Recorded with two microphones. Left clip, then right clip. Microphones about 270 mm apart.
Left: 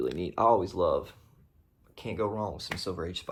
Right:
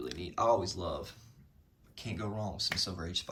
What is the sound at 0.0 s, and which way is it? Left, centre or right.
Speech, centre.